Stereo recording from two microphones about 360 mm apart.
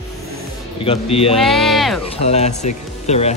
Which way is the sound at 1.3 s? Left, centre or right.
Centre.